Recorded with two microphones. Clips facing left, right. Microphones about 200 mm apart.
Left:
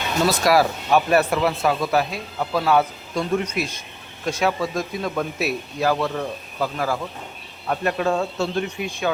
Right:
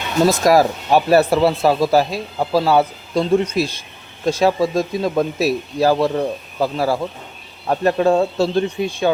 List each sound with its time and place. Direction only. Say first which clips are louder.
0.3 s speech: right 4 dB; 40° right (ahead or behind)